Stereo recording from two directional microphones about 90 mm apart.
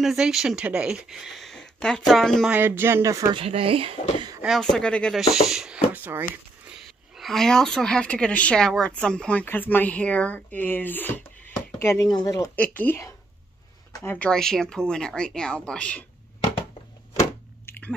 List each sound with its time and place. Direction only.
0.0 s speech: 5° right (ahead or behind)
2.5 s speech: 25° right (ahead or behind)
3.1 s speech: 40° right (ahead or behind)
3.3 s speech: 90° right
4.5 s a woman's voice: 5° left (ahead or behind)
5.1 s speech: 5° right (ahead or behind)
5.9 s speech: 20° right (ahead or behind)
6.7 s a woman's voice: centre (ahead or behind); by 11.2 s 20° left (ahead or behind)
11.8 s speech: 30° left (ahead or behind)
12.5 s speech: 20° left (ahead or behind)
14.0 s a woman's voice: 15° left (ahead or behind)
14.3 s a woman's voice: 5° left (ahead or behind)
17.6 s chewing: 20° left (ahead or behind)